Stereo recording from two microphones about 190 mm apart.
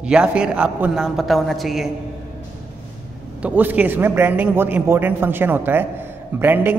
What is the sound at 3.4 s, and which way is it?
A man's voice, 10° right (ahead or behind).